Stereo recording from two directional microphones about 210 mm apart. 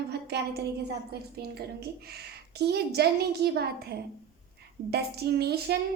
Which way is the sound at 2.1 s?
50° right (ahead or behind).